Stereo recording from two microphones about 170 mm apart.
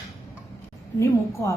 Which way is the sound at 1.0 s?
15° left (ahead or behind).